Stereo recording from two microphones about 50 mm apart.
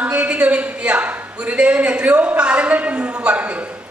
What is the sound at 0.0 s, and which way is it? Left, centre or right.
A woman's voice, right.